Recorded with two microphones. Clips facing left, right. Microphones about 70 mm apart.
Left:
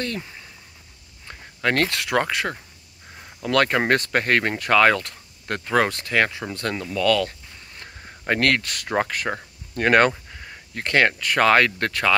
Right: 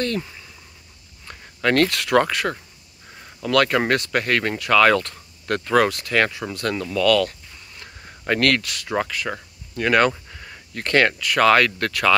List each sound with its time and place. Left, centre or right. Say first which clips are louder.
0.0 s speech: right 4 dB; centre
3.4 s speech: right 1 dB; left
4.8 s speech: right 2 dB; centre
5.9 s speech: right 1 dB; left
6.8 s a sound: right 3 dB; centre
8.3 s speech: right 1 dB; left
8.6 s speech: left 1 dB; left
10.3 s a sound: even; centre
11.1 s speech: right 1 dB; left